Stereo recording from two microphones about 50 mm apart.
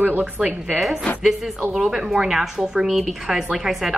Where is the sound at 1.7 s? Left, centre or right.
Centre.